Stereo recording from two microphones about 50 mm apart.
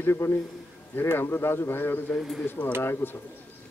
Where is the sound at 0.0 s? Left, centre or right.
Left.